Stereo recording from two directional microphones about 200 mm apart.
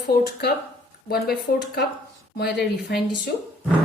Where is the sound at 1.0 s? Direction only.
50° left (ahead or behind).